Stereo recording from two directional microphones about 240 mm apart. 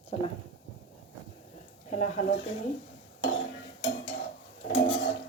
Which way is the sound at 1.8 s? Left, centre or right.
Left.